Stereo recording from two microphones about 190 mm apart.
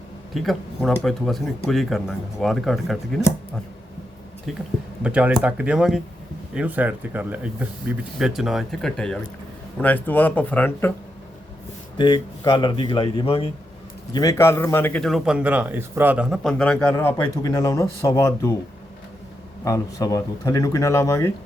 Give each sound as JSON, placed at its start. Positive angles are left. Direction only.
{"t": 0.3, "sound": "a man's voice", "side_deg": 0}
{"t": 5.0, "sound": "a man's voice", "side_deg": -5}
{"t": 11.9, "sound": "a man's voice", "side_deg": 20}
{"t": 14.1, "sound": "a man's voice", "side_deg": 20}
{"t": 19.6, "sound": "speech", "side_deg": 20}